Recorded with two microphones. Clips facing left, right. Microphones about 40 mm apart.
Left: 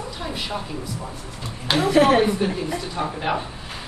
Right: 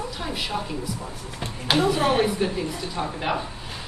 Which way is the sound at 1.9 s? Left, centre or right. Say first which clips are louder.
Left 11 dB; left.